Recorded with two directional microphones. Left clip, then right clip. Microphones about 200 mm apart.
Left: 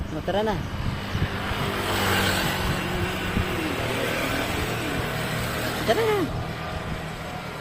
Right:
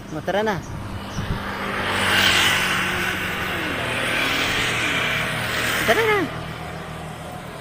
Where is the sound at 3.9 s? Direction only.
60° left (ahead or behind).